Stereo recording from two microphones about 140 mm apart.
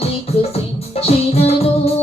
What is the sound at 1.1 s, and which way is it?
Music, 45° left (ahead or behind).